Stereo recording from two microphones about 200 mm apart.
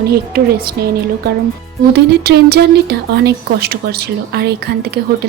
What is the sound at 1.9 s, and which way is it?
Speech, 50° right (ahead or behind).